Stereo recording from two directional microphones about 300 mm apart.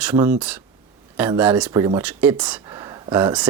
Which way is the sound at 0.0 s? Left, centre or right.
Centre.